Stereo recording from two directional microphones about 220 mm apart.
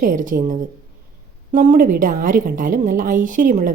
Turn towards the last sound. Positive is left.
turn(degrees=-35)  # may be behind; listen again after turning